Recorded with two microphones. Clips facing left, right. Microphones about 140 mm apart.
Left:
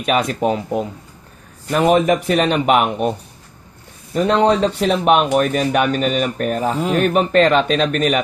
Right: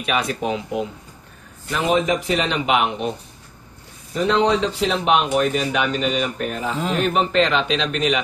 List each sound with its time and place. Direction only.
0.0 s speech: 45° left (ahead or behind)
1.7 s speech: 55° left (ahead or behind)
4.1 s speech: 50° left (ahead or behind)